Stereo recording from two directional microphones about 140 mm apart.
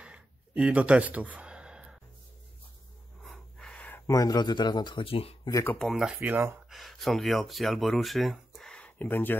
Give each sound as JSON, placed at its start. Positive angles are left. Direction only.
{"t": 0.0, "sound": "a sound", "side_deg": -10}
{"t": 3.3, "sound": "breathing", "side_deg": 5}
{"t": 4.1, "sound": "speech", "side_deg": 25}
{"t": 5.5, "sound": "speech", "side_deg": 20}
{"t": 5.8, "sound": "speech", "side_deg": 0}
{"t": 6.2, "sound": "speech", "side_deg": -15}
{"t": 6.7, "sound": "speech", "side_deg": 0}